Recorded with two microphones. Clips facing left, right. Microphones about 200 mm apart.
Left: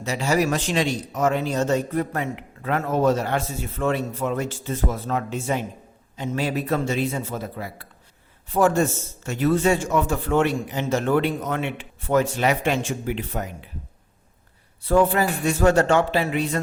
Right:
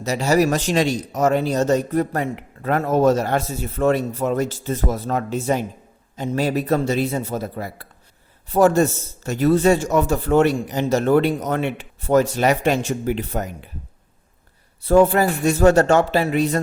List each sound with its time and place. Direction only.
0.0 s speech: 40° right (ahead or behind)
14.8 s speech: 40° right (ahead or behind)